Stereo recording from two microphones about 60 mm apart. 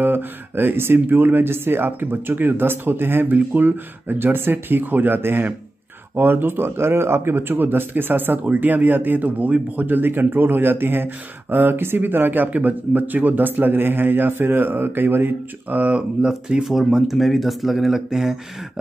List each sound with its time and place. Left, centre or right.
0.0 s speech: right; by 18.4 s centre